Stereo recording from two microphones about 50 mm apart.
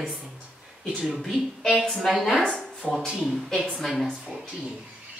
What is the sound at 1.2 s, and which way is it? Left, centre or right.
Speech, centre.